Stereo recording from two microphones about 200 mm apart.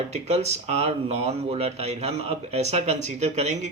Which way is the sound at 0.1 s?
30° right (ahead or behind).